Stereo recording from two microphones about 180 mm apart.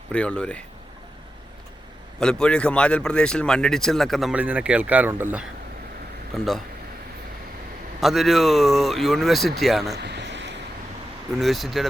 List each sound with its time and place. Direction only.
0.1 s speech: 5° left (ahead or behind)
2.1 s speech: 5° left (ahead or behind)
6.3 s speech: centre (ahead or behind)
8.0 s speech: centre (ahead or behind)
9.9 s a sound: 70° right (ahead or behind)
11.3 s speech: centre (ahead or behind)